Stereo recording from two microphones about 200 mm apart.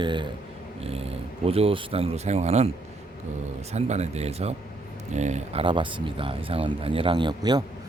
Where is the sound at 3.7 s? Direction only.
35° right (ahead or behind).